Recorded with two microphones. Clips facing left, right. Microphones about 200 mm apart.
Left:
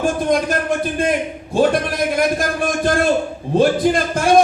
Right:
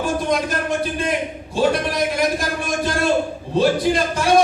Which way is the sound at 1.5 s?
50° left (ahead or behind).